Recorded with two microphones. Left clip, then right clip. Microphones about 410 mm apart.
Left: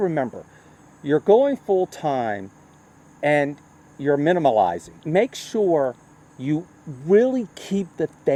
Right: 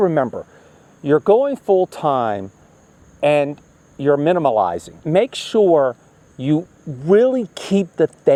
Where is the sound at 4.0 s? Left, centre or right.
Right.